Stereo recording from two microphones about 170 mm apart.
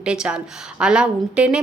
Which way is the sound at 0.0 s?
5° right (ahead or behind).